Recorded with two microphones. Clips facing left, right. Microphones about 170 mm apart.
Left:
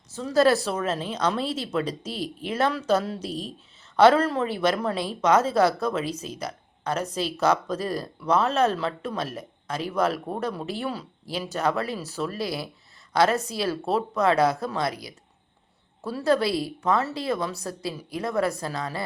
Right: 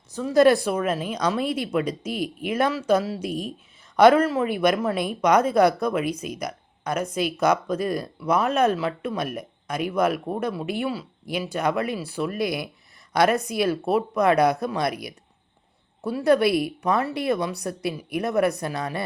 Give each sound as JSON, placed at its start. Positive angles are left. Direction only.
{"t": 0.1, "sound": "speech", "side_deg": -15}
{"t": 16.0, "sound": "a woman's voice", "side_deg": -15}